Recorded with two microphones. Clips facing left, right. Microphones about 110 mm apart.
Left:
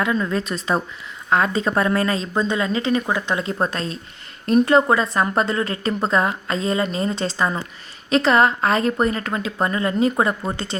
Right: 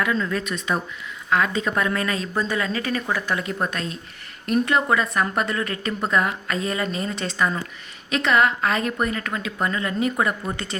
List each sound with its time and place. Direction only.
0.0 s a woman's voice: 25° left (ahead or behind)